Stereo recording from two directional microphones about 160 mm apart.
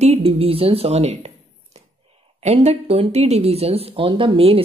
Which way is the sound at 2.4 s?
40° right (ahead or behind).